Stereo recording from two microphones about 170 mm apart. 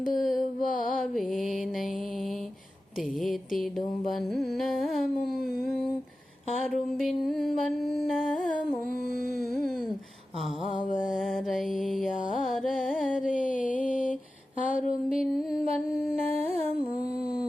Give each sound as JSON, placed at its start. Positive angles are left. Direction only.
{"t": 0.0, "sound": "music", "side_deg": 50}
{"t": 0.9, "sound": "mantra", "side_deg": 0}
{"t": 3.2, "sound": "mantra", "side_deg": 0}
{"t": 5.1, "sound": "a sound", "side_deg": 65}
{"t": 7.0, "sound": "mantra", "side_deg": 0}
{"t": 8.2, "sound": "humming", "side_deg": 50}
{"t": 9.4, "sound": "a sound", "side_deg": 0}
{"t": 10.7, "sound": "music", "side_deg": 50}
{"t": 11.0, "sound": "mantra", "side_deg": -5}
{"t": 12.4, "sound": "carnatic music", "side_deg": 0}
{"t": 13.2, "sound": "music", "side_deg": 50}
{"t": 14.6, "sound": "a sound", "side_deg": 50}